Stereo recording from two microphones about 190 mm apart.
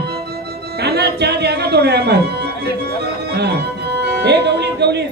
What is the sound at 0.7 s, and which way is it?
Speech, 60° right (ahead or behind).